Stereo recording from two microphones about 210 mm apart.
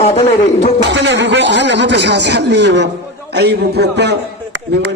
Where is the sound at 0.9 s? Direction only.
55° right (ahead or behind).